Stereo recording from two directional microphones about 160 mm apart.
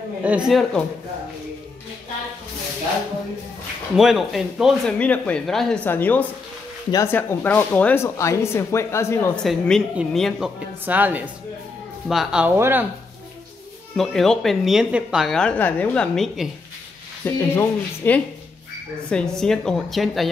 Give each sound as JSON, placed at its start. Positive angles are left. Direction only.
{"t": 0.2, "sound": "a woman's voice", "side_deg": -5}
{"t": 3.9, "sound": "a woman's voice", "side_deg": 0}
{"t": 4.9, "sound": "speech", "side_deg": 10}
{"t": 9.4, "sound": "a woman's voice", "side_deg": 0}
{"t": 12.5, "sound": "a woman's voice", "side_deg": -15}
{"t": 13.9, "sound": "a woman's voice", "side_deg": 0}
{"t": 19.3, "sound": "a woman's voice", "side_deg": 5}